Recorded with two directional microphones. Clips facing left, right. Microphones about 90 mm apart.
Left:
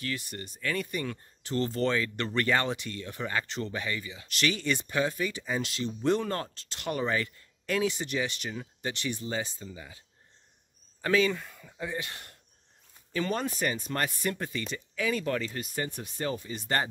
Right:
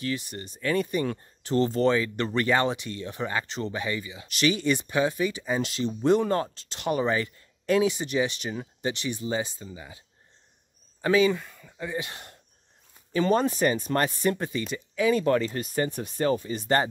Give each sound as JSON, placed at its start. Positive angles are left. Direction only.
{"t": 0.0, "sound": "speech", "side_deg": -20}
{"t": 11.3, "sound": "speech", "side_deg": 0}
{"t": 12.0, "sound": "speech", "side_deg": -20}
{"t": 14.6, "sound": "speech", "side_deg": -15}
{"t": 15.0, "sound": "speech", "side_deg": -35}